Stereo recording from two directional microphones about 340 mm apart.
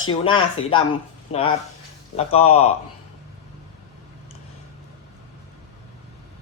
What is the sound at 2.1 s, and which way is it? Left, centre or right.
Speech, centre.